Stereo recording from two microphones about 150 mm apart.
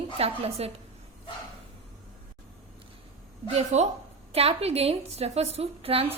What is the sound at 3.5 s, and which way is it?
A woman's voice, 45° right (ahead or behind).